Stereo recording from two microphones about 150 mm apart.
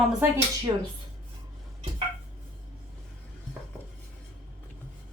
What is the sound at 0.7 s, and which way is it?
Speech, 30° right (ahead or behind).